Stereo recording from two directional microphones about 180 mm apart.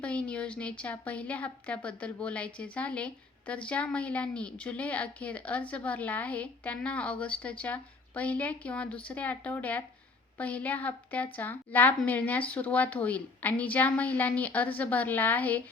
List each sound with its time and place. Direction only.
0.0 s a woman's voice: 5° left (ahead or behind)